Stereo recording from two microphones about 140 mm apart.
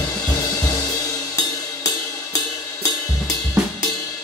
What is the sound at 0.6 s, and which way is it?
Music, 25° left (ahead or behind).